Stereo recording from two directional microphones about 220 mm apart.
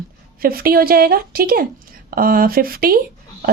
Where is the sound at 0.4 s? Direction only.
45° right (ahead or behind).